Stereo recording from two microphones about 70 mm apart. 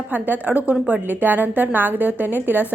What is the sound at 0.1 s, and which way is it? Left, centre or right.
A woman's voice, right.